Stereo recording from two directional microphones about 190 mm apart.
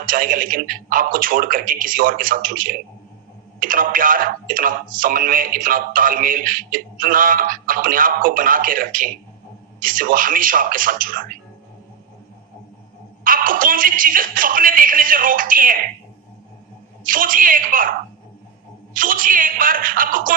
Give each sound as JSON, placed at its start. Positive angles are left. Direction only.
{"t": 0.0, "sound": "speech", "side_deg": -45}
{"t": 13.2, "sound": "speech", "side_deg": -45}
{"t": 17.0, "sound": "speech", "side_deg": -45}
{"t": 18.9, "sound": "speech", "side_deg": -45}